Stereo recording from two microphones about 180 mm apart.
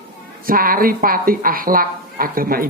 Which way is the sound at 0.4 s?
50° right (ahead or behind).